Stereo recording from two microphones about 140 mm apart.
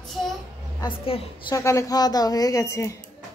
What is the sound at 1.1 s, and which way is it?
Speech, 40° left (ahead or behind).